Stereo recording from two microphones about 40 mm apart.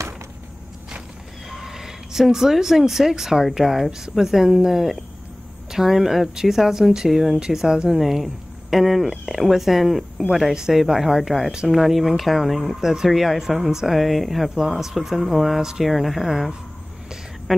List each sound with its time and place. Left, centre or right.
1.5 s speech: centre
7.5 s speech: centre
8.0 s speech: centre
10.5 s speech: centre
12.8 s speech: centre